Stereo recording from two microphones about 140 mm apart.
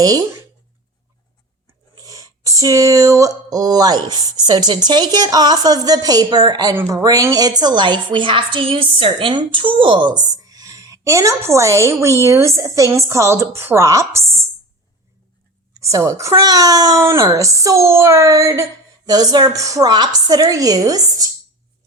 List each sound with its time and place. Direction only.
0.0 s a woman's voice: 25° right (ahead or behind)
2.0 s a woman's voice: 25° right (ahead or behind)
15.8 s a woman's voice: 20° right (ahead or behind)